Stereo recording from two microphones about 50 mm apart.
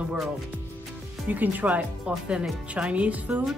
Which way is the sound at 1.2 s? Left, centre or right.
Right.